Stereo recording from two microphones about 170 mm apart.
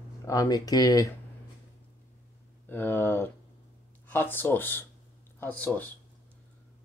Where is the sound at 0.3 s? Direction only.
20° left (ahead or behind).